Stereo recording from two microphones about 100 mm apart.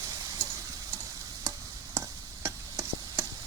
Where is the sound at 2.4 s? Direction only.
30° right (ahead or behind).